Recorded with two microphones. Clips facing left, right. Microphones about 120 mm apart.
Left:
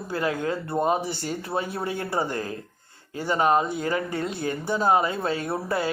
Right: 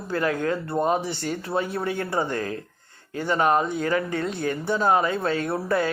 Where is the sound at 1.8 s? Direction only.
35° left (ahead or behind).